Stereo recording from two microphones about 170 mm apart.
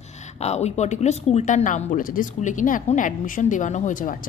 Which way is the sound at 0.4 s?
40° left (ahead or behind).